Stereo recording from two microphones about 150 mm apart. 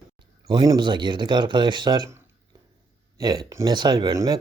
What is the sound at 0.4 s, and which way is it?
Speech, 30° right (ahead or behind).